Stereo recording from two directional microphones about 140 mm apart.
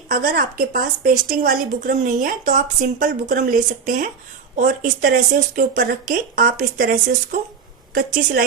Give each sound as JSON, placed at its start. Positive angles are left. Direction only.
{"t": 0.1, "sound": "a woman's voice", "side_deg": -90}
{"t": 7.9, "sound": "a woman's voice", "side_deg": -90}